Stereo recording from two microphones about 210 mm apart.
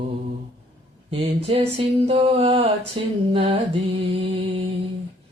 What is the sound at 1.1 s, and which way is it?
Mantra, 25° right (ahead or behind).